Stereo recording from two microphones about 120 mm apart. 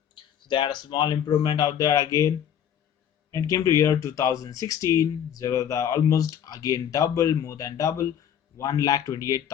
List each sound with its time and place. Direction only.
0.1 s speech: 45° left (ahead or behind); by 2.3 s 25° left (ahead or behind)
3.3 s speech: 30° left (ahead or behind)